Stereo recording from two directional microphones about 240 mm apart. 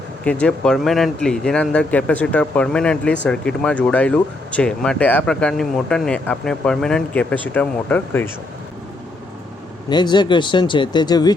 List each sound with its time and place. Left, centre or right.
0.3 s speech: centre
9.9 s speech: centre